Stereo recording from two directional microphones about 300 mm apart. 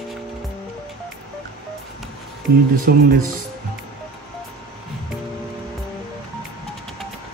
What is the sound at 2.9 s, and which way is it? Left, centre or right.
Speech, right.